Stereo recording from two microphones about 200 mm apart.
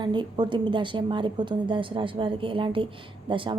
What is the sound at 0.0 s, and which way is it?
A woman's voice, 20° right (ahead or behind).